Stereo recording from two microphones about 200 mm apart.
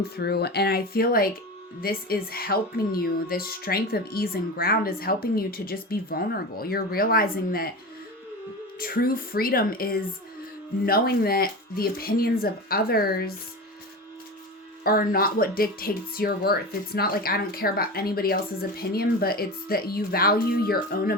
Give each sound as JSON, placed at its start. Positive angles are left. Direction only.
{"t": 0.0, "sound": "speech", "side_deg": 50}
{"t": 8.8, "sound": "speech", "side_deg": 50}
{"t": 14.8, "sound": "speech", "side_deg": 45}